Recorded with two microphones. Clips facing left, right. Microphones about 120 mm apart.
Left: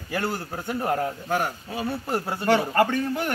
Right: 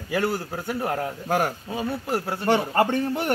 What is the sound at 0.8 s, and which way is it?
Speech, centre (ahead or behind).